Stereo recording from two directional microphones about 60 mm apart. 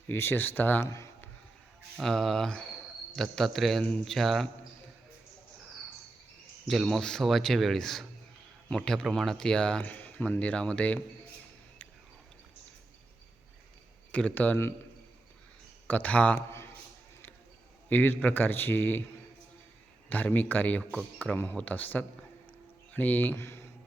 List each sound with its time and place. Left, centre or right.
0.1 s a man's voice: left
0.9 s speech: left
2.0 s speech: centre
2.5 s cricket: centre
3.2 s speech: centre
6.8 s speech: centre
9.8 s speech: left
14.1 s speech: left
15.9 s speech: left
16.5 s a sound: left
17.8 s a man's voice: left
20.1 s speech: left